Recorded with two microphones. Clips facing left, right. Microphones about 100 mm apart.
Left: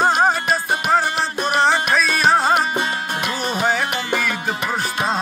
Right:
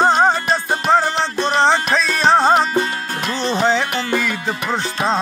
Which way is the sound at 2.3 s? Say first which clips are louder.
Right 5 dB; 25° right (ahead or behind).